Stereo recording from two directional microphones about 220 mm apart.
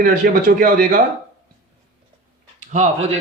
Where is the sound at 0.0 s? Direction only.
40° right (ahead or behind).